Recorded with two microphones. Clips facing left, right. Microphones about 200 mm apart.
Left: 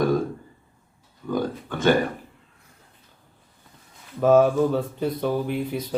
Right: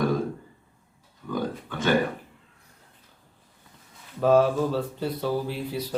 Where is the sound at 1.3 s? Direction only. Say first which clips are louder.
Left 4 dB; 45° left (ahead or behind).